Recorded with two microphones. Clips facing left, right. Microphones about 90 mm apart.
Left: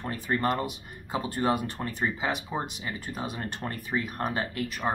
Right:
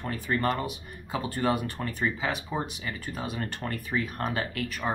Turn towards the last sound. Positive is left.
turn(degrees=20)  # may be behind; listen again after turning